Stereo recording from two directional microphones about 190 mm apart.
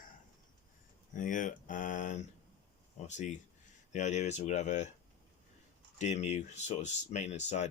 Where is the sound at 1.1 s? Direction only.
45° left (ahead or behind).